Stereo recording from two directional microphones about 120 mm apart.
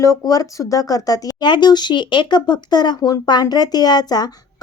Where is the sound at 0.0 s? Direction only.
30° left (ahead or behind).